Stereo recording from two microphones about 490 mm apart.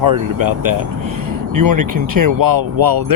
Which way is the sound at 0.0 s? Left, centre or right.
Right.